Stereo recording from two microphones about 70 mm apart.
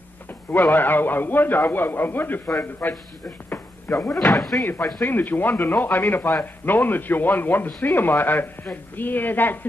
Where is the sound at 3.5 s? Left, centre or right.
Left.